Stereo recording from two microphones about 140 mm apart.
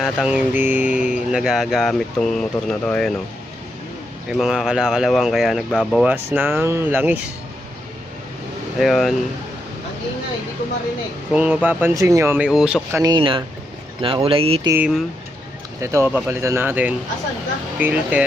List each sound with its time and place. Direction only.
0.0 s speech: 5° right (ahead or behind)
4.3 s speech: 5° right (ahead or behind)
6.1 s speech: 15° right (ahead or behind)
8.8 s speech: centre (ahead or behind)
11.3 s speech: 10° right (ahead or behind)
12.5 s speech: 5° right (ahead or behind)
12.9 s speech: 25° right (ahead or behind)
13.1 s speech: 35° right (ahead or behind)
14.8 s speech: 5° right (ahead or behind)
15.8 s speech: 20° right (ahead or behind)